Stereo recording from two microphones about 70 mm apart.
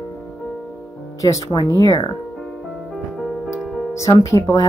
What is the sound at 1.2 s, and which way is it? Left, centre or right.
Speech, left.